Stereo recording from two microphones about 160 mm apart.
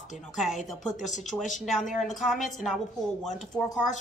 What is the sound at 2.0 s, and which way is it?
Speech, centre (ahead or behind).